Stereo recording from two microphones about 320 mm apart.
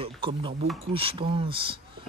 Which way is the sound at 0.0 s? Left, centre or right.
Centre.